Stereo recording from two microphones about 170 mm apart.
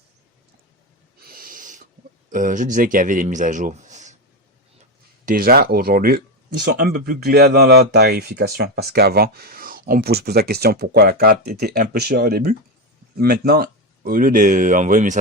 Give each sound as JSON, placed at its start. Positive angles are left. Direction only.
{"t": 1.2, "sound": "owl", "side_deg": -60}
{"t": 2.3, "sound": "speech", "side_deg": -50}
{"t": 5.2, "sound": "speech", "side_deg": -55}